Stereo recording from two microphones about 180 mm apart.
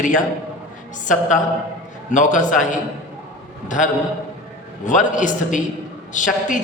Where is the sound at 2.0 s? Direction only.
45° left (ahead or behind).